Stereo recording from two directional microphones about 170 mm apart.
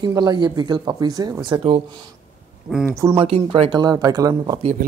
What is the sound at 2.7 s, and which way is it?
Speech, centre (ahead or behind).